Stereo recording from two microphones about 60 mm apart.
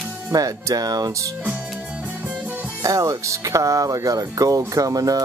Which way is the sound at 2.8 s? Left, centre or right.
Right.